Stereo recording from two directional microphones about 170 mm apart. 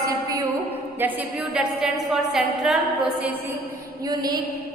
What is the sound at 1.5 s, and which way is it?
A woman's voice, 5° right (ahead or behind).